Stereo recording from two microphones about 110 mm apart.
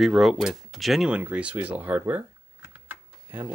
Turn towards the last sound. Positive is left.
turn(degrees=-20)  # may be behind; listen again after turning